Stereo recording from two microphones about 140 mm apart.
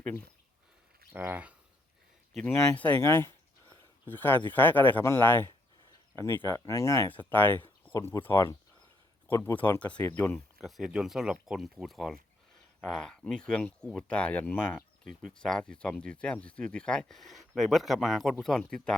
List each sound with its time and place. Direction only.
0.0 s speech: 10° left (ahead or behind)
1.1 s speech: 15° right (ahead or behind)
2.4 s speech: 10° left (ahead or behind)
7.9 s speech: 25° left (ahead or behind)
10.3 s speech: centre (ahead or behind)